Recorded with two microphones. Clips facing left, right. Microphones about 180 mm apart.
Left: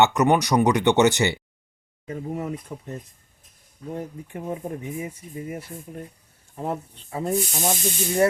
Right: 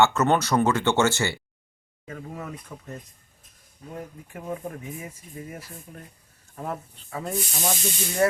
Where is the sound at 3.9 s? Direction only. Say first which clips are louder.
Left 4 dB; 25° left (ahead or behind).